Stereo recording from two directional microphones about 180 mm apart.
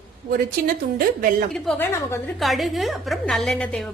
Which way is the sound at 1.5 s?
5° left (ahead or behind).